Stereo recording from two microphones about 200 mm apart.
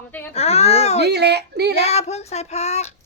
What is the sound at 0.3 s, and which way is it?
Baby cry, 30° left (ahead or behind).